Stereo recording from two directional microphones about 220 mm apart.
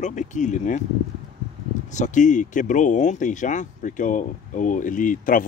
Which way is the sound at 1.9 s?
35° left (ahead or behind).